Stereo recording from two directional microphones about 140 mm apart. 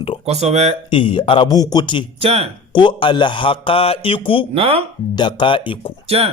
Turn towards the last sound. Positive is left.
turn(degrees=-45)  # may be behind; listen again after turning